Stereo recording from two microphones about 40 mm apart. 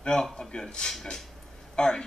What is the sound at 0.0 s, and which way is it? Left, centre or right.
Speech, centre.